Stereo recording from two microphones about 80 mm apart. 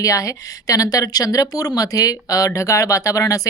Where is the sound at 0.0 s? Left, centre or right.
Left.